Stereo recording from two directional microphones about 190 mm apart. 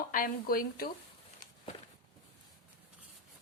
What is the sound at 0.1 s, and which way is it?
Speech, 50° left (ahead or behind).